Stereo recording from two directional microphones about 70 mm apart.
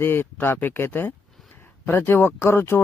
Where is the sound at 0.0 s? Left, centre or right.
Left.